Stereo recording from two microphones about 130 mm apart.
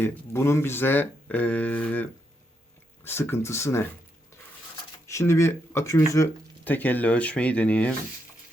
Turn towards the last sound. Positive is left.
turn(degrees=10)  # may be behind; listen again after turning